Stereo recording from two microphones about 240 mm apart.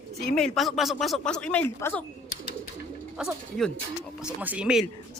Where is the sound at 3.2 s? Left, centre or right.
Centre.